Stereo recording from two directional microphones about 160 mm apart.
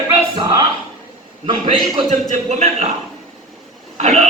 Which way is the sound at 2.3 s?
40° right (ahead or behind).